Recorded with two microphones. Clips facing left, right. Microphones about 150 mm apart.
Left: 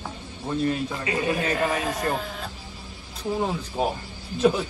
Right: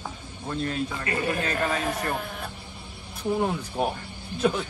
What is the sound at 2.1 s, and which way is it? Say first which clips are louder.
Speech: left 2 dB; 10° right (ahead or behind).